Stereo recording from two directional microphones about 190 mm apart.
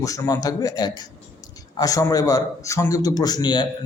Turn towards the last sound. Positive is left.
turn(degrees=25)  # may be behind; listen again after turning